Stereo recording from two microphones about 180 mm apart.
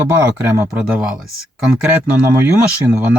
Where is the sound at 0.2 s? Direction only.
10° right (ahead or behind).